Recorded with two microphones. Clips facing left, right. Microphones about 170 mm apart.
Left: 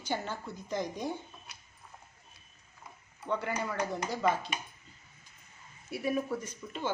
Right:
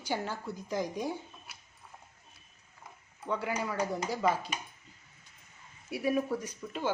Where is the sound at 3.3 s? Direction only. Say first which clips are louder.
Even; 5° right (ahead or behind).